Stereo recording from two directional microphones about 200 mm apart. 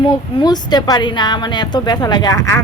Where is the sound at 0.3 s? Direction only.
20° left (ahead or behind).